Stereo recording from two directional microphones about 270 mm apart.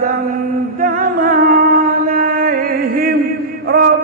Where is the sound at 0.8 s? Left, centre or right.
Right.